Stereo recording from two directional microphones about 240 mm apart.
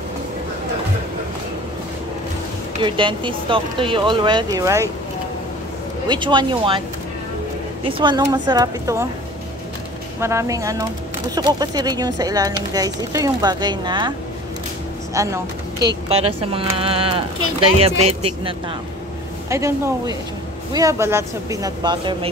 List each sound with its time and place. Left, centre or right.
2.8 s speech: right
6.0 s speech: centre
7.8 s speech: centre
10.2 s speech: centre
15.1 s speech: centre
19.5 s speech: centre